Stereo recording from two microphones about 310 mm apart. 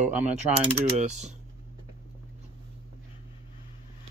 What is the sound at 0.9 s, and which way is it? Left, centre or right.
Speech, right.